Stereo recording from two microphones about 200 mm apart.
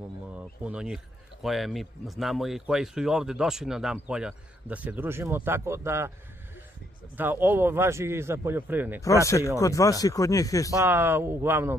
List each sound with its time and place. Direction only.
0.7 s speech: 5° right (ahead or behind)
7.2 s a man's voice: 10° right (ahead or behind)
9.6 s speech: 15° left (ahead or behind)
10.7 s a man's voice: 10° right (ahead or behind)